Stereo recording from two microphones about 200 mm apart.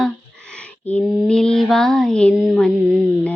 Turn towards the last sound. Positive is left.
turn(degrees=-5)  # may be behind; listen again after turning